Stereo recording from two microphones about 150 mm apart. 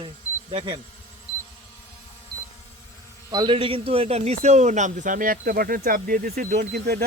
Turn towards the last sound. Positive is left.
turn(degrees=-90)